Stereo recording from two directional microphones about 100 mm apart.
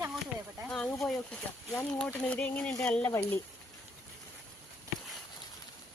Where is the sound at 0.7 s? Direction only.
5° left (ahead or behind).